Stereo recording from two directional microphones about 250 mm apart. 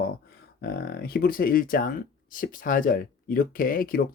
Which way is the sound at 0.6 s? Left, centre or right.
Left.